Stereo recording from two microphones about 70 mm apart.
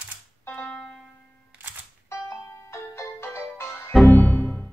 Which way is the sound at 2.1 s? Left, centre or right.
Left.